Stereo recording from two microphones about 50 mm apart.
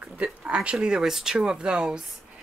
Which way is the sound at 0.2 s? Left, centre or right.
Right.